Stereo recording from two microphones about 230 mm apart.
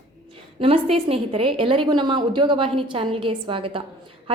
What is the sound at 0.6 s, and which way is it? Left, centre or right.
A woman's voice, right.